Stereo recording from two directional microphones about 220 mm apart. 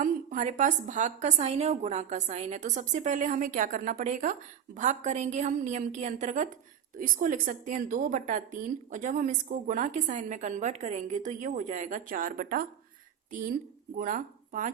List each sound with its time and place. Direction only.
0.0 s a woman's voice: 35° right (ahead or behind)
14.0 s speech: 35° right (ahead or behind)